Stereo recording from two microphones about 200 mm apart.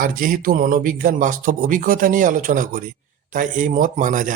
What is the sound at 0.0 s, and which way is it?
Speech, 45° right (ahead or behind).